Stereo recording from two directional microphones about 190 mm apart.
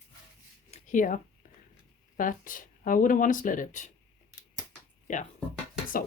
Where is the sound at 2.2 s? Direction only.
45° left (ahead or behind).